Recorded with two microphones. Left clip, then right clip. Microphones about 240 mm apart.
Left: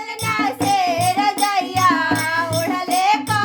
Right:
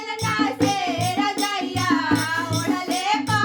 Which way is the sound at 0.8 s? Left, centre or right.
Left.